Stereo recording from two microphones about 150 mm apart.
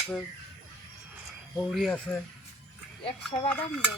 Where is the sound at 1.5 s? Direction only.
Centre (ahead or behind).